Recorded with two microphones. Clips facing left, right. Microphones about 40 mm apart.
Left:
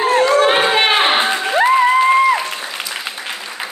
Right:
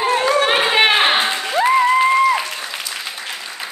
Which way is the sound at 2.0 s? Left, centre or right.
Centre.